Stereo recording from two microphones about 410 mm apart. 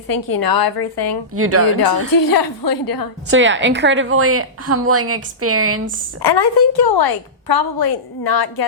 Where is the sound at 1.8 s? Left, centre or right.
Left.